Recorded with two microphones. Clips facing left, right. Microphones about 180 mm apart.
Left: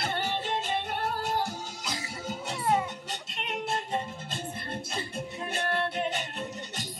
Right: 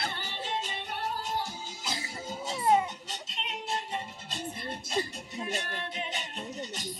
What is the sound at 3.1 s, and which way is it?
Music, 55° left (ahead or behind).